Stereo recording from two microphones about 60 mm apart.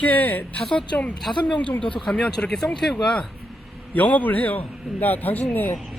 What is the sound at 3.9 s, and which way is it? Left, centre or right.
A man's voice, left.